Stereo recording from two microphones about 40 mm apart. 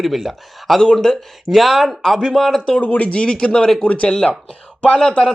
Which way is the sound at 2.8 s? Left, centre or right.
Left.